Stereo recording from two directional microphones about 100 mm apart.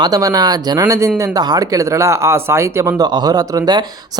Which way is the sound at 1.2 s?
40° right (ahead or behind).